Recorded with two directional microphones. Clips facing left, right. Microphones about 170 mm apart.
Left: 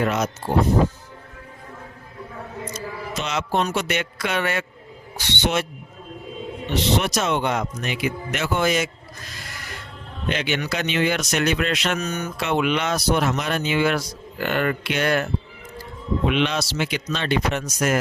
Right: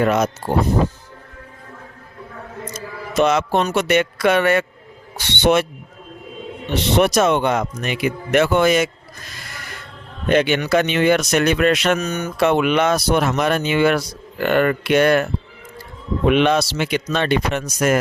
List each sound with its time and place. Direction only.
0.0 s speech: 55° right (ahead or behind)
2.7 s speech: 55° right (ahead or behind)
6.9 s speech: 55° right (ahead or behind)
10.2 s speech: 50° right (ahead or behind)